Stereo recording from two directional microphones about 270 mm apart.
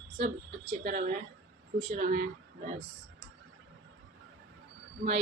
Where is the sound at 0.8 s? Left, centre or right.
Right.